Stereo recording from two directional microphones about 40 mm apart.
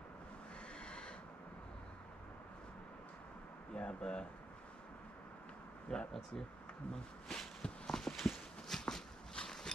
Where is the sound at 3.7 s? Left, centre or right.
Left.